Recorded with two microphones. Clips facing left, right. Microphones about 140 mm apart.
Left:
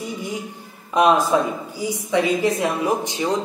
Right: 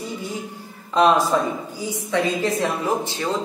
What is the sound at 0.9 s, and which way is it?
A woman's voice, 15° left (ahead or behind).